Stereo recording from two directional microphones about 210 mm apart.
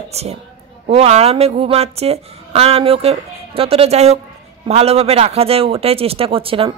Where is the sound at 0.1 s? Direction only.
30° right (ahead or behind).